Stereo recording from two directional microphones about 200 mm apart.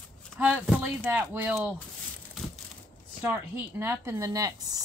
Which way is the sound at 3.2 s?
10° right (ahead or behind).